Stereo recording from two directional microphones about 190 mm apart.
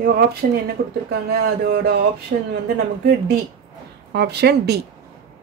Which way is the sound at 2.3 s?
45° right (ahead or behind).